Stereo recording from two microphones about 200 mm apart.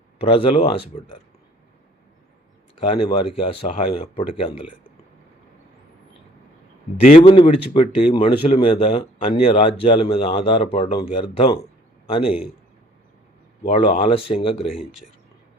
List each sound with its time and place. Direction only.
0.2 s speech: 30° left (ahead or behind)
2.9 s speech: 25° left (ahead or behind)
7.3 s speech: 25° left (ahead or behind)
13.7 s speech: 30° left (ahead or behind)